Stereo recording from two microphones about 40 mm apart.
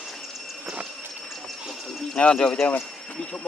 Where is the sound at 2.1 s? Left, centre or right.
Left.